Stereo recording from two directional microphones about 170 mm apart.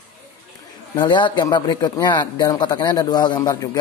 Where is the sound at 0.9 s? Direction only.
25° left (ahead or behind).